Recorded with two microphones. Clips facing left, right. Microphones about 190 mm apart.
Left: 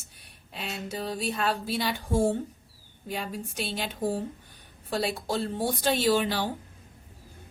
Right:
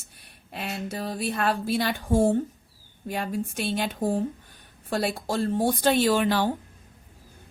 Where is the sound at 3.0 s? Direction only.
50° right (ahead or behind).